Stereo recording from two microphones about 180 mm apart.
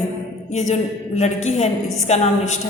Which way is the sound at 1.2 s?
40° left (ahead or behind).